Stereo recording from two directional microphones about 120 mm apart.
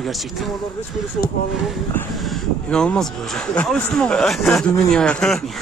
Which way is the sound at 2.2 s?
5° left (ahead or behind).